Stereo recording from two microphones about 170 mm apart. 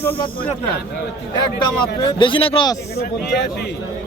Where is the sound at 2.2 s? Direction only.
30° left (ahead or behind).